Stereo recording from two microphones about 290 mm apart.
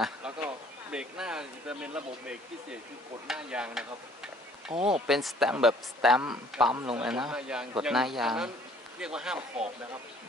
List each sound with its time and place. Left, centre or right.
0.0 s a sound: centre
0.9 s speech: centre
3.3 s speech: centre
4.7 s speech: centre
5.0 s speech: centre